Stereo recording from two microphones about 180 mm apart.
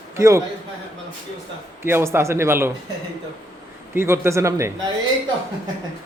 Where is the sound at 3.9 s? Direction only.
15° right (ahead or behind).